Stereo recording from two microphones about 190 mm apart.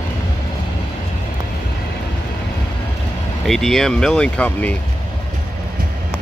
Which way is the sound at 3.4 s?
Centre (ahead or behind).